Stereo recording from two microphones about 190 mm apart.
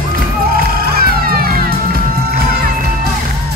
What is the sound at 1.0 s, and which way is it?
Music, 55° right (ahead or behind).